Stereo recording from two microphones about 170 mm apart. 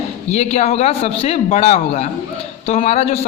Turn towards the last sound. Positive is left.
turn(degrees=40)  # may be behind; listen again after turning